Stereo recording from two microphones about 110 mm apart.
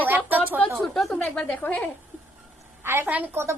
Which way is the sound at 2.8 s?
20° right (ahead or behind).